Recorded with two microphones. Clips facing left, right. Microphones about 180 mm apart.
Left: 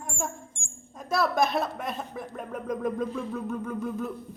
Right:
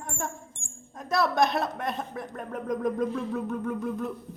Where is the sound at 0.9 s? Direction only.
Centre (ahead or behind).